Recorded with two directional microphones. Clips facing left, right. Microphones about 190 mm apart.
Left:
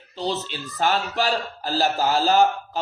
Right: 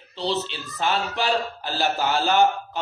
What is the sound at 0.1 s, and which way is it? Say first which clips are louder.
A man's voice: right 1 dB; 45° left (ahead or behind).